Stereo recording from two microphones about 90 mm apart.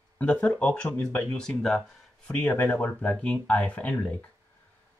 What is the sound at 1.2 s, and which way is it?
Speech, 10° left (ahead or behind).